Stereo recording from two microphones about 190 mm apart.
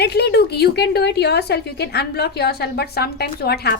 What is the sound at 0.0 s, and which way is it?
A woman's voice, 60° left (ahead or behind).